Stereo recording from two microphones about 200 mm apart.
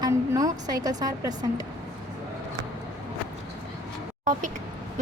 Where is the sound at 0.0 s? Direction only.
20° right (ahead or behind).